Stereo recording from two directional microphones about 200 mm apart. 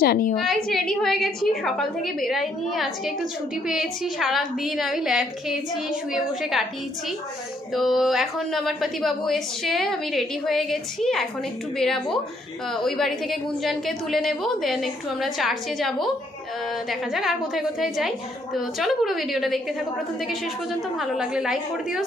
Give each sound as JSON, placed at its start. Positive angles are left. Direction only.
{"t": 0.0, "sound": "a woman's voice", "side_deg": 50}
{"t": 0.7, "sound": "a woman's voice", "side_deg": 0}
{"t": 7.7, "sound": "a woman's voice", "side_deg": 0}
{"t": 21.0, "sound": "a woman's voice", "side_deg": -5}